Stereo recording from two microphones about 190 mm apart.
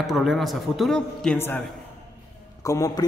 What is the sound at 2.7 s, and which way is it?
Speech, 20° left (ahead or behind).